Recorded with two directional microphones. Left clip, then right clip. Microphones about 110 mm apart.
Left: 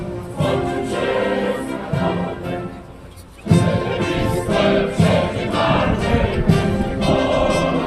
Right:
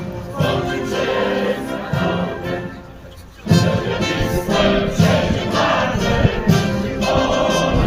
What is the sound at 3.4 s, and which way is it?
Music, 50° right (ahead or behind).